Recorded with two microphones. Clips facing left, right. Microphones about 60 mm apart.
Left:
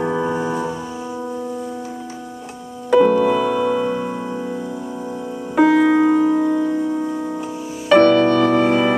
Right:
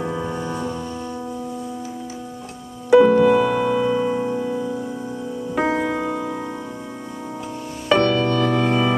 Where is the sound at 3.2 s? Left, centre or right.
Centre.